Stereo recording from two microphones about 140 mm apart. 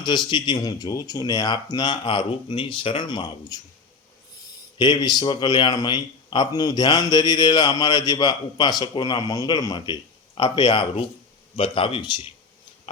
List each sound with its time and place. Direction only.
0.3 s speech: 30° left (ahead or behind)
4.8 s speech: 30° left (ahead or behind)